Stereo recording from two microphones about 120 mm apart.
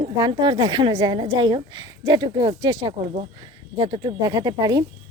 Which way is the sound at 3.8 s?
45° right (ahead or behind).